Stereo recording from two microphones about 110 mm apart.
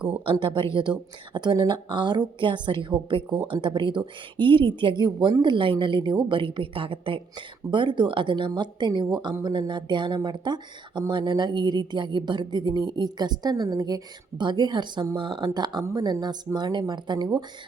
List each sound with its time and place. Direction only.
0.3 s speech: 50° right (ahead or behind)